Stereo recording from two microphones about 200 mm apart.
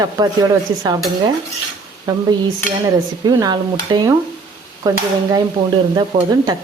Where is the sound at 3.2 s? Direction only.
20° right (ahead or behind).